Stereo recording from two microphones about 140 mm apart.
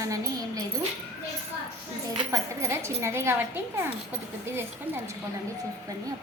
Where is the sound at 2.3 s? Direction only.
20° right (ahead or behind).